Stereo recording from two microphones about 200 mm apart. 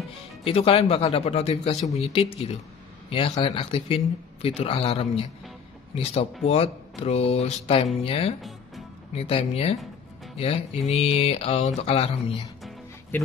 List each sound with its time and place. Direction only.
0.4 s speech: 30° left (ahead or behind)
6.4 s speech: 30° left (ahead or behind)
8.4 s music: centre (ahead or behind)
9.1 s speech: 30° left (ahead or behind)
13.1 s speech: 10° left (ahead or behind)